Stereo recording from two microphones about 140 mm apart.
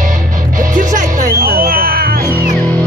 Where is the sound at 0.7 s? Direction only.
70° right (ahead or behind); by 2.5 s 90° right.